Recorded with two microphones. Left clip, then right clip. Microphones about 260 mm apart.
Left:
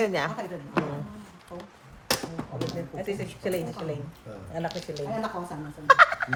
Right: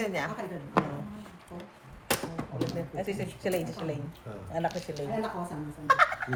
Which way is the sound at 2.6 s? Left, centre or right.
Centre.